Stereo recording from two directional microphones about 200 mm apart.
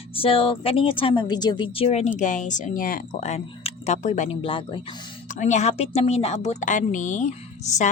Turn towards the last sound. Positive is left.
turn(degrees=35)  # may be behind; listen again after turning